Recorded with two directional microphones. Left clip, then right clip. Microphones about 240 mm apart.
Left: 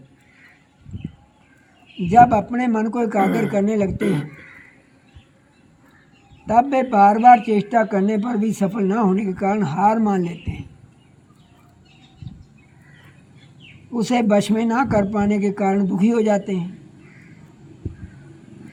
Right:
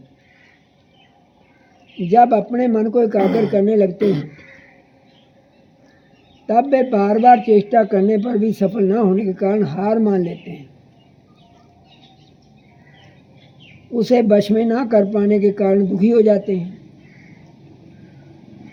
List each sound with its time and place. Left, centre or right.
2.0 s speech: left
3.2 s speech: centre
3.5 s speech: left
4.0 s speech: centre
6.5 s speech: left
13.9 s speech: left